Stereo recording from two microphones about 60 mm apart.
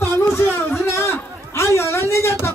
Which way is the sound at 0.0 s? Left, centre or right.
Left.